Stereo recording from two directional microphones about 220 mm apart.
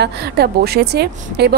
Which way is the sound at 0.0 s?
45° right (ahead or behind).